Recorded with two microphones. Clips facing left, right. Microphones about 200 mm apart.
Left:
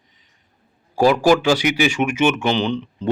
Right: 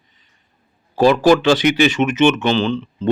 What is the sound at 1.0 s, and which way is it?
Speech, 10° left (ahead or behind).